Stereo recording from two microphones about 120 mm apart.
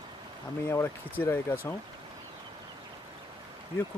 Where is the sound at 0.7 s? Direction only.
20° left (ahead or behind).